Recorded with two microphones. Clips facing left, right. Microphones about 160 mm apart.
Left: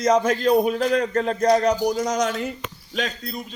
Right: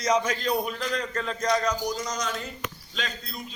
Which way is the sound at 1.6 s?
65° left (ahead or behind).